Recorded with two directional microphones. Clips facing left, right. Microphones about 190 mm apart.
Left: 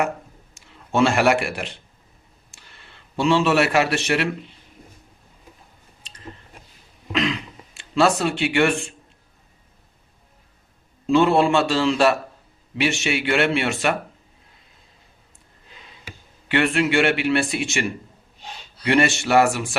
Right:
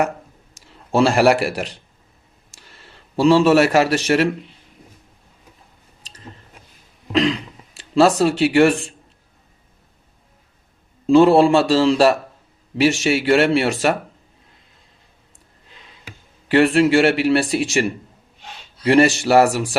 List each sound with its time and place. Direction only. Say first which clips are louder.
0.5 s a man's voice: right 4 dB; 35° right (ahead or behind)
6.0 s biting: right 3 dB; 40° right (ahead or behind)
7.1 s throat clearing: right 5 dB; 35° right (ahead or behind)
8.4 s speech: right 7 dB; 40° right (ahead or behind)
11.1 s speech: right 5 dB; 35° right (ahead or behind)
16.5 s speech: right 6 dB; 35° right (ahead or behind)
18.9 s speech: right 5 dB; 35° right (ahead or behind)